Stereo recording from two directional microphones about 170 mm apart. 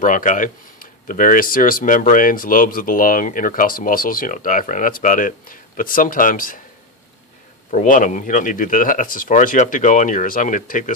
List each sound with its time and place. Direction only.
0.0 s speech: 50° left (ahead or behind)
7.7 s speech: 50° left (ahead or behind)